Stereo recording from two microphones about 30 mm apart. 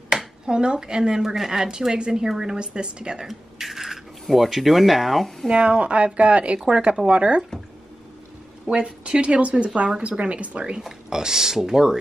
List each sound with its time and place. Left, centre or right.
0.5 s speech: right
1.2 s speech: centre
2.0 s speech: right
2.2 s speech: centre
2.5 s speech: right
3.3 s a sound: centre
5.5 s speech: right
6.6 s speech: right
8.6 s speech: right
10.8 s speech: centre